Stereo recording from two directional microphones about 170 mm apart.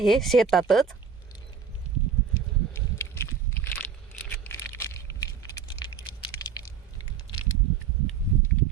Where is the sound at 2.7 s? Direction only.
15° left (ahead or behind).